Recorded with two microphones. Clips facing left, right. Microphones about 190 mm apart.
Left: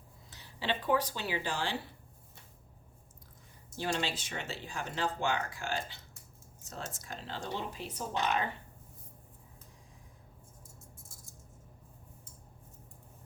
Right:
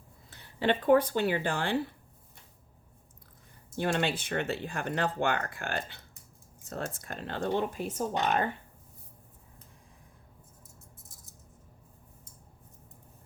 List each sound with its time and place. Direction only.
0.3 s speech: 55° right (ahead or behind)
3.8 s speech: 55° right (ahead or behind)